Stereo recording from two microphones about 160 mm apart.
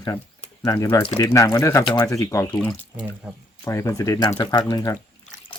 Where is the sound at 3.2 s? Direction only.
10° right (ahead or behind).